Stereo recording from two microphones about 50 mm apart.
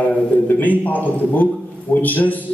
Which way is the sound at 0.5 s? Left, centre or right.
Left.